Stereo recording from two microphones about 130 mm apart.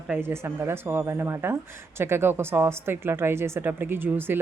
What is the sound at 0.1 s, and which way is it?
A woman's voice, 20° right (ahead or behind).